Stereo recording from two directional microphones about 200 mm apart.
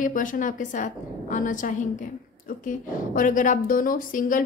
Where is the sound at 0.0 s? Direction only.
40° left (ahead or behind).